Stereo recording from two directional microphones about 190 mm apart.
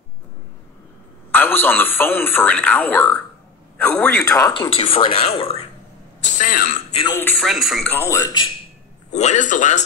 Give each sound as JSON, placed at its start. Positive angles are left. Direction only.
{"t": 1.3, "sound": "a man's voice", "side_deg": 10}
{"t": 4.6, "sound": "speech", "side_deg": 30}
{"t": 6.3, "sound": "speech", "side_deg": 45}
{"t": 7.1, "sound": "a man's voice", "side_deg": 10}
{"t": 7.3, "sound": "speech", "side_deg": 0}
{"t": 8.1, "sound": "speech", "side_deg": 20}
{"t": 9.1, "sound": "speech", "side_deg": 40}